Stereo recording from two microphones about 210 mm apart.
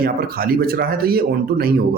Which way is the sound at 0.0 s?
45° right (ahead or behind).